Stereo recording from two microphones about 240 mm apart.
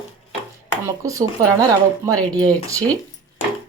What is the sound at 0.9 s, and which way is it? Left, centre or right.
Dishes, centre.